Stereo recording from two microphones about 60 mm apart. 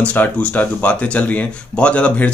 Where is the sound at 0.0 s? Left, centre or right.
Left.